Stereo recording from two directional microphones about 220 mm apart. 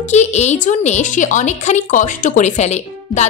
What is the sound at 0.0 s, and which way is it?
A woman's voice, 30° left (ahead or behind).